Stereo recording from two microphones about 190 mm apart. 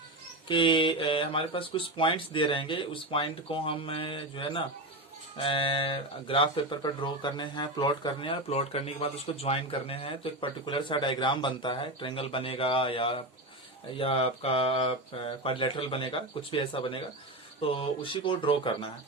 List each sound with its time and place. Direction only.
0.4 s speech: 25° left (ahead or behind)